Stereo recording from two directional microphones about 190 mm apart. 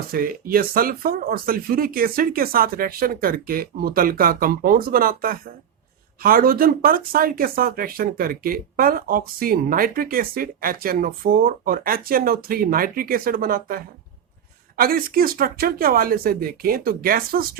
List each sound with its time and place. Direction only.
0.1 s speech: 50° right (ahead or behind)